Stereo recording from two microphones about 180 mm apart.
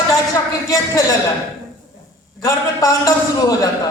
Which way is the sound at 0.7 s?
20° left (ahead or behind).